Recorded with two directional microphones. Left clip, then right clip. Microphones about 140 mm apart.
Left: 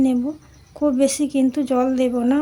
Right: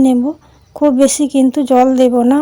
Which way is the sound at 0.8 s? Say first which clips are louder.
Right 8 dB; 45° right (ahead or behind).